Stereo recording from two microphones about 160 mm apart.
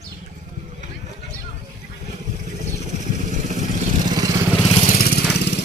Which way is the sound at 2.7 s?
50° right (ahead or behind).